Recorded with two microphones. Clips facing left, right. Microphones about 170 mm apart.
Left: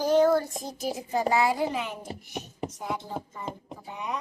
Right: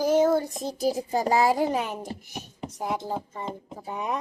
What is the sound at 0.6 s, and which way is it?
A woman's voice, 35° right (ahead or behind).